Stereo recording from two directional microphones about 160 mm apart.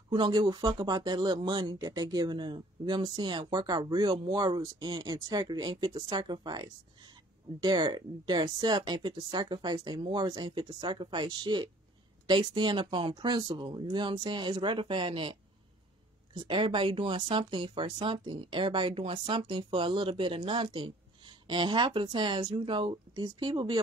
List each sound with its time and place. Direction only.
0.1 s speech: 30° right (ahead or behind)
16.4 s speech: 30° right (ahead or behind)